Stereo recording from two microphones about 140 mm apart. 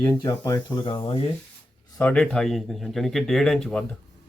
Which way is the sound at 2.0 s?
10° left (ahead or behind).